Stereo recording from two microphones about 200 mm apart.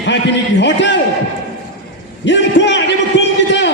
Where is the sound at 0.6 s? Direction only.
65° left (ahead or behind).